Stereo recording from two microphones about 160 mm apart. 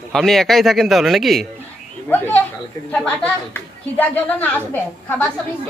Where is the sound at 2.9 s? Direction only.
5° left (ahead or behind).